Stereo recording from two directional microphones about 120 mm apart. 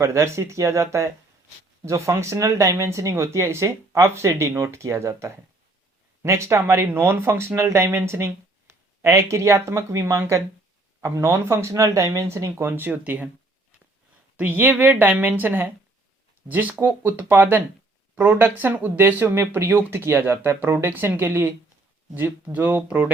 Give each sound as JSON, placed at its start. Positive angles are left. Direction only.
{"t": 0.0, "sound": "speech", "side_deg": -20}
{"t": 14.3, "sound": "speech", "side_deg": -15}